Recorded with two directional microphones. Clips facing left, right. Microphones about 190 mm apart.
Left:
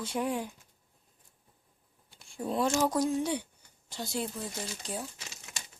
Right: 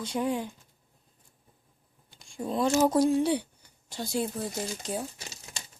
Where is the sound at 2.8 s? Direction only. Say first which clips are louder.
Right 5 dB; 30° right (ahead or behind).